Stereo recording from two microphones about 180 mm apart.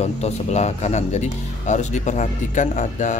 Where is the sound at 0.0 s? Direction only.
40° left (ahead or behind).